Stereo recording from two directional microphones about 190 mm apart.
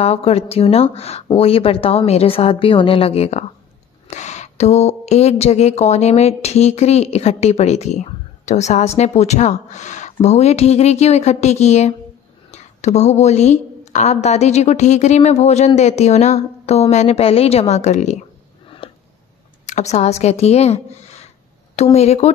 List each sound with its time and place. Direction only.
0.0 s a woman's voice: 35° left (ahead or behind)
18.8 s a sound: 25° left (ahead or behind)
19.6 s speech: 35° left (ahead or behind)